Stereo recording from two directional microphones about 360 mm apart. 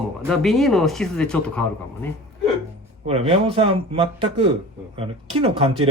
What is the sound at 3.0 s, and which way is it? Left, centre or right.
Speech, centre.